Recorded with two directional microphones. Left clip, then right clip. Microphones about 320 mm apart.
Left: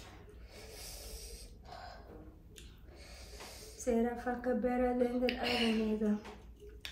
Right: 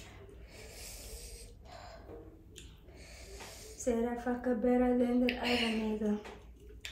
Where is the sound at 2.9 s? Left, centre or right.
Centre.